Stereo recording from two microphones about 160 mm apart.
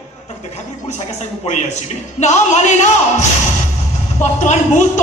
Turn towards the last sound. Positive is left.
turn(degrees=45)  # may be behind; listen again after turning